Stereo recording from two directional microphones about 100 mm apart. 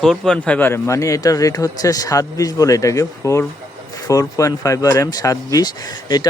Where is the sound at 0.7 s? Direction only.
25° left (ahead or behind).